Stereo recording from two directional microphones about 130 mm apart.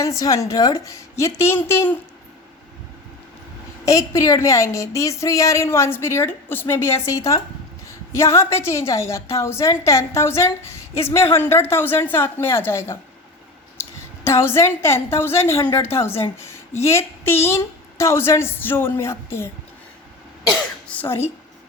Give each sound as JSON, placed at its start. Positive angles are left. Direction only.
{"t": 0.0, "sound": "a woman's voice", "side_deg": 25}
{"t": 3.8, "sound": "a woman's voice", "side_deg": 25}
{"t": 14.3, "sound": "a woman's voice", "side_deg": 20}
{"t": 20.5, "sound": "speech", "side_deg": 10}